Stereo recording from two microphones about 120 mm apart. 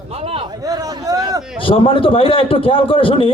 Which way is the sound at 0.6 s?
30° right (ahead or behind).